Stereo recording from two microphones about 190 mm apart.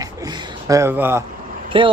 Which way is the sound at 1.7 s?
25° right (ahead or behind).